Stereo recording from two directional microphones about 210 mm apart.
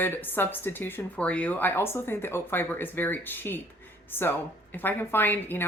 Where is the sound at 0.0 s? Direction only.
10° left (ahead or behind).